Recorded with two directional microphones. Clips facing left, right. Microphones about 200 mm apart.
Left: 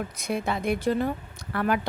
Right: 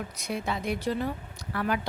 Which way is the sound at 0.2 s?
55° left (ahead or behind).